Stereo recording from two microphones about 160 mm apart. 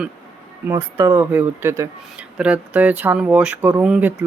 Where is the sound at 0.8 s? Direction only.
25° right (ahead or behind).